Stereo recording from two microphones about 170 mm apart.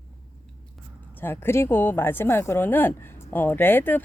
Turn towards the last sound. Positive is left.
turn(degrees=10)  # may be behind; listen again after turning